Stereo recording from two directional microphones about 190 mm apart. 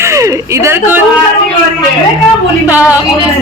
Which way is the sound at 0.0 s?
15° right (ahead or behind).